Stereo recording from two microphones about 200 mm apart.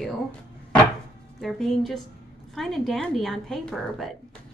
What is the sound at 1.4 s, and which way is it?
Speech, centre (ahead or behind).